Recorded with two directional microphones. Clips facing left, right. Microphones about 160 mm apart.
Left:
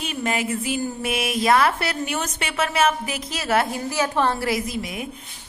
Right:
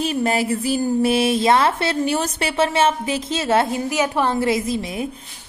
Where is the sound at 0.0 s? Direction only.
35° right (ahead or behind).